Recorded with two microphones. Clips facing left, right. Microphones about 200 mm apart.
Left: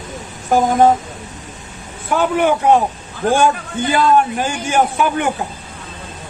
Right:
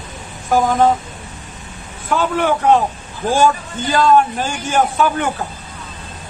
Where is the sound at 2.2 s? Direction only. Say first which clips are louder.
Left 2 dB; 15° left (ahead or behind).